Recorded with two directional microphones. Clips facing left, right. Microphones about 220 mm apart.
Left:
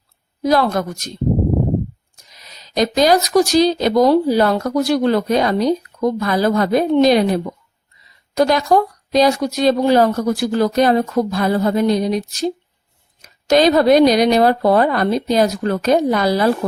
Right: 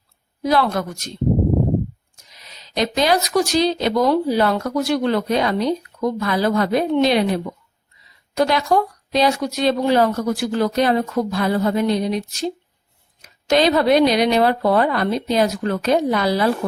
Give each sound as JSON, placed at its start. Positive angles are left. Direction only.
{"t": 0.4, "sound": "speech", "side_deg": 40}
{"t": 2.3, "sound": "speech", "side_deg": 40}